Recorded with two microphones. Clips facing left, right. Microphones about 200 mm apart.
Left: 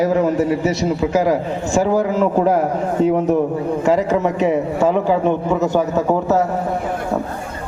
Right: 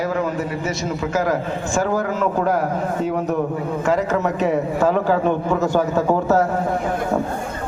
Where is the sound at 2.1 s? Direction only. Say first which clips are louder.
Left 4 dB; 25° left (ahead or behind).